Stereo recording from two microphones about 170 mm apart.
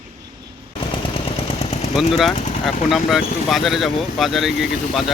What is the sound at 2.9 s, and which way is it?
Speech, centre (ahead or behind).